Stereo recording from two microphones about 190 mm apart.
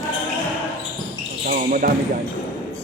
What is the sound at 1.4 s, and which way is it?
Basketball bounce, 45° right (ahead or behind).